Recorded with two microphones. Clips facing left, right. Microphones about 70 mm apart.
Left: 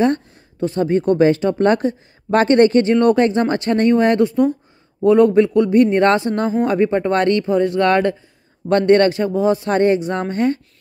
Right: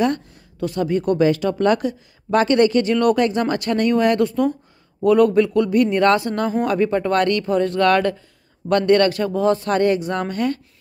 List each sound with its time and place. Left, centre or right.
0.0 s speech: left